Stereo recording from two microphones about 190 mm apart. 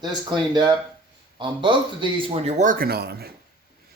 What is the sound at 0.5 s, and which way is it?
Speech, 20° right (ahead or behind).